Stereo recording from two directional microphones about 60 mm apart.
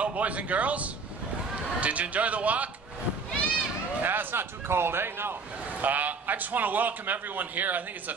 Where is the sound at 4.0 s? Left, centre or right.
Right.